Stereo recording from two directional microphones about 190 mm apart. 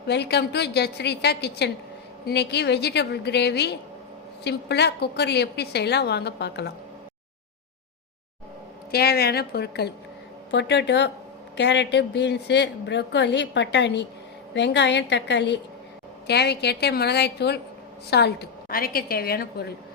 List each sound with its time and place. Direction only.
0.1 s a woman's voice: 60° left (ahead or behind)
8.9 s a woman's voice: 55° left (ahead or behind)